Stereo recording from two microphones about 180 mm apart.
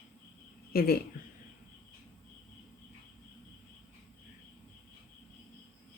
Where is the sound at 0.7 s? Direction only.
60° left (ahead or behind).